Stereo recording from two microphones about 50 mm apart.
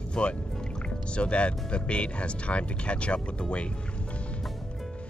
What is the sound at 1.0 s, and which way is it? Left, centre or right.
Speech, left.